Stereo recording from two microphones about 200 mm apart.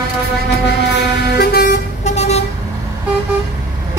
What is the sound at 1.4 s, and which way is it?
Vehicle, 50° left (ahead or behind).